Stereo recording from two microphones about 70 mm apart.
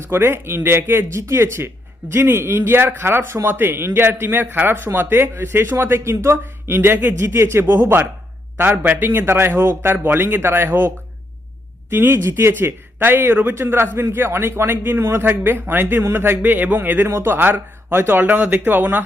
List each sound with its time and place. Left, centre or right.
0.1 s speech: right